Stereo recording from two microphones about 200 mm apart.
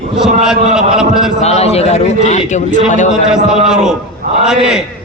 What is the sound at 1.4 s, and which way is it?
A man's voice, 30° left (ahead or behind).